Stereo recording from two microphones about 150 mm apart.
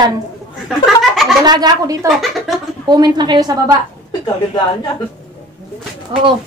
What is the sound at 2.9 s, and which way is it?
Speech, 30° right (ahead or behind).